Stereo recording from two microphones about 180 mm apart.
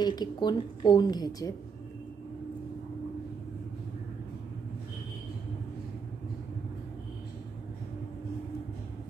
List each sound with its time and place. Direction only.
0.0 s a woman's voice: 25° left (ahead or behind)